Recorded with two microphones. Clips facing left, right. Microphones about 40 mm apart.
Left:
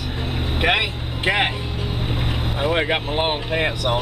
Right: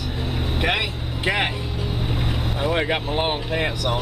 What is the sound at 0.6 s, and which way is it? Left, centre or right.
Speech, left.